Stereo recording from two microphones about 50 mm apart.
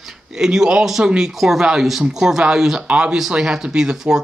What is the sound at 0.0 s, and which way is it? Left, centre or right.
Speech, centre.